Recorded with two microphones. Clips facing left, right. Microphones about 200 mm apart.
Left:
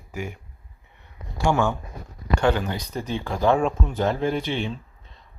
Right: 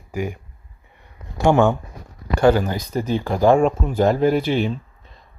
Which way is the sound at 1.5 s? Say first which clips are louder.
Right 7 dB; 55° right (ahead or behind).